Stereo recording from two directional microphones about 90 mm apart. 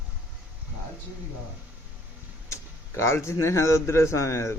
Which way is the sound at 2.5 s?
30° left (ahead or behind).